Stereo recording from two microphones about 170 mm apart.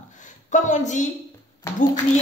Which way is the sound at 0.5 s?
45° left (ahead or behind).